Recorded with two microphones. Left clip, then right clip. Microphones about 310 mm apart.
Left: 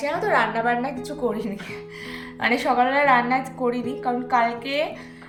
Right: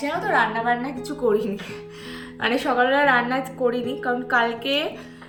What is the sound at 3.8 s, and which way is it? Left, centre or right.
A woman's voice, centre.